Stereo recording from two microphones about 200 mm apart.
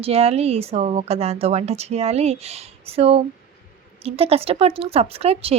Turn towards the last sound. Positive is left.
turn(degrees=-30)  # may be behind; listen again after turning